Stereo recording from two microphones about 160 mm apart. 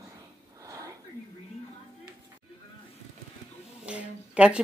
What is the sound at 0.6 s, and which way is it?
Sniff, 20° right (ahead or behind).